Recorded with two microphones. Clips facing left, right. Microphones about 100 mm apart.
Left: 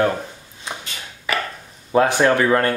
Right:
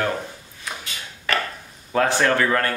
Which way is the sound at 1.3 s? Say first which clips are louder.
Even; 10° left (ahead or behind).